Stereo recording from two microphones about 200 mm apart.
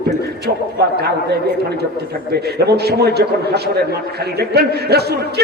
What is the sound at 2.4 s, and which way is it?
A man's voice, 55° right (ahead or behind).